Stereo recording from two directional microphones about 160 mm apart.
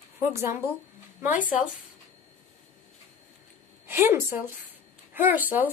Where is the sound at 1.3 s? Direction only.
55° left (ahead or behind).